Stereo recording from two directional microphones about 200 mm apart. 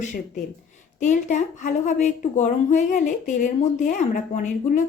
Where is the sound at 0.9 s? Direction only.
40° left (ahead or behind).